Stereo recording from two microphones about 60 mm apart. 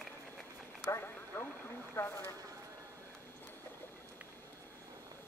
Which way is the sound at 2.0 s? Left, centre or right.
Left.